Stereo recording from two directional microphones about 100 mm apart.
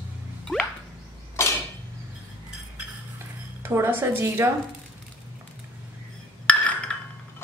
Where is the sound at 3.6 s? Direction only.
25° right (ahead or behind).